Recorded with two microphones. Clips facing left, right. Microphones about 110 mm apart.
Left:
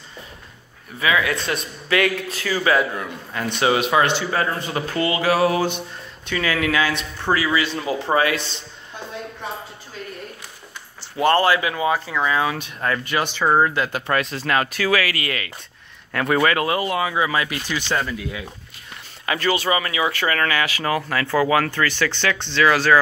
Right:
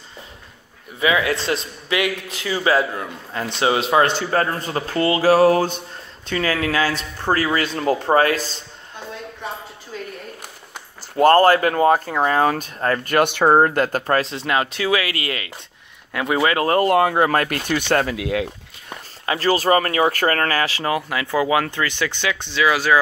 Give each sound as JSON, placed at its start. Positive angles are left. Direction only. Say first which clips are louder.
{"t": 0.9, "sound": "speech", "louder": "right 2 dB", "side_deg": -25}
{"t": 10.7, "sound": "speech", "louder": "right 3 dB", "side_deg": -45}
{"t": 13.5, "sound": "speech", "louder": "right 1 dB", "side_deg": -50}
{"t": 16.1, "sound": "speech", "louder": "left 1 dB", "side_deg": -15}
{"t": 16.6, "sound": "speech", "louder": "right 6 dB", "side_deg": -50}
{"t": 19.2, "sound": "speech", "louder": "right 3 dB", "side_deg": -30}